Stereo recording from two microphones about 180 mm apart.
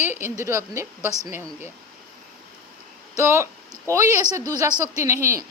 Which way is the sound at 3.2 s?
15° right (ahead or behind).